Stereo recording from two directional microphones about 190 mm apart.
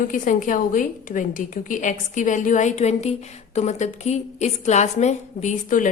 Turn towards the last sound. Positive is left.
turn(degrees=45)  # may be behind; listen again after turning